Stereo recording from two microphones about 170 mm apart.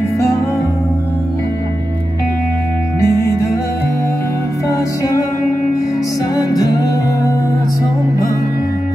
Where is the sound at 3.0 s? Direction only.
15° left (ahead or behind).